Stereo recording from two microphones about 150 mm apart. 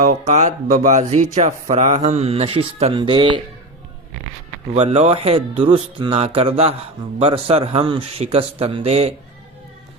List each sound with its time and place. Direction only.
0.0 s speech: 50° right (ahead or behind); by 3.4 s 35° right (ahead or behind)
4.7 s speech: 40° right (ahead or behind)